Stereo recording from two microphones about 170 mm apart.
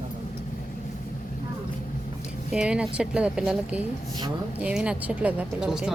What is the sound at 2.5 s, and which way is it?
A woman's voice, 5° right (ahead or behind).